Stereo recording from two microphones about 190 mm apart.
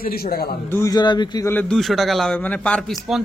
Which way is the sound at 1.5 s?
Centre (ahead or behind).